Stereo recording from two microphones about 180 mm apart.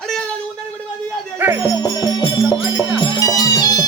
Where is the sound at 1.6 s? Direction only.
20° left (ahead or behind).